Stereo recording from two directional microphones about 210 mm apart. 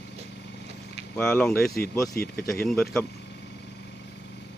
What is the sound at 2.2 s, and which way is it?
Speech, 45° left (ahead or behind).